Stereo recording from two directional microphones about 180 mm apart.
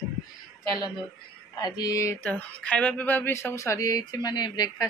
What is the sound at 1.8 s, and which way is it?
Speech, 20° left (ahead or behind).